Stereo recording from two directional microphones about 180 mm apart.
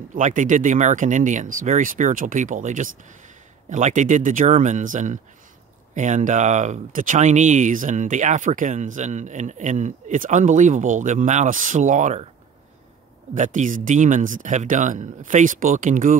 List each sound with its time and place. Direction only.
0.1 s speech: 45° right (ahead or behind)
13.3 s speech: 45° right (ahead or behind)